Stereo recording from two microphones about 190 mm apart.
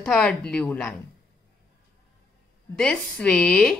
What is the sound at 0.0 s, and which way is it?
Speech, 5° left (ahead or behind).